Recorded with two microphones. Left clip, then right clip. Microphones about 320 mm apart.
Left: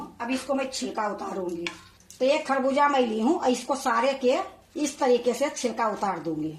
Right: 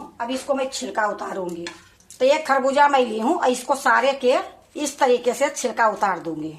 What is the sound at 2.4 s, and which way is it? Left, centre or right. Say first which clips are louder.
A woman's voice: right 6 dB; right.